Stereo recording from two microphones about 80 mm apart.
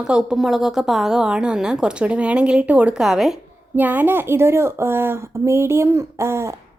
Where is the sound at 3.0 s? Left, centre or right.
Centre.